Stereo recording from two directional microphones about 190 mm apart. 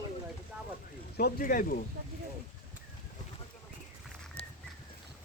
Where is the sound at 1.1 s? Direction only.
50° left (ahead or behind).